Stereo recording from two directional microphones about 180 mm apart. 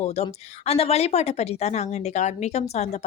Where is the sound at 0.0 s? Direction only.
35° left (ahead or behind).